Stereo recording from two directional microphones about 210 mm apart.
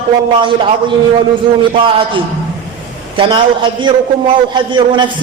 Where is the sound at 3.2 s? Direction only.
20° right (ahead or behind).